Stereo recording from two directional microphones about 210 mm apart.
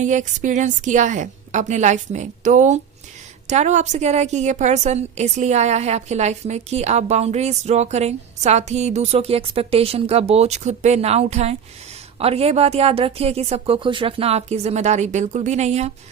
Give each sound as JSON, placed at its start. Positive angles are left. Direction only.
{"t": 0.0, "sound": "a woman's voice", "side_deg": -35}